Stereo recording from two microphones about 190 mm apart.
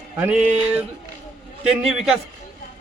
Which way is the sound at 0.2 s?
5° right (ahead or behind).